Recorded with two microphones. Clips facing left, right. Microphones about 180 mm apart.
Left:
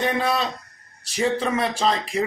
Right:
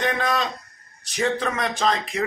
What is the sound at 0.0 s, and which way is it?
A man's voice, 5° left (ahead or behind).